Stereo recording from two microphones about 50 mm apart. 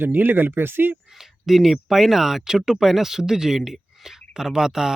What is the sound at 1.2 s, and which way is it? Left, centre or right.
Speech, centre.